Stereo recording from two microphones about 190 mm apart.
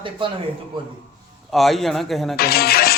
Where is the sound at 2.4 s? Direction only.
55° left (ahead or behind).